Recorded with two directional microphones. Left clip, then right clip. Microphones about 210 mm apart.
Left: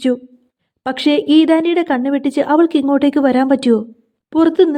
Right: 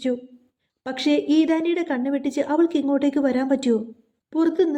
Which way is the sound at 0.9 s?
25° left (ahead or behind).